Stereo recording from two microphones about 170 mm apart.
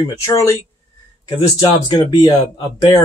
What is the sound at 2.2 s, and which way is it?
Speech, 20° left (ahead or behind).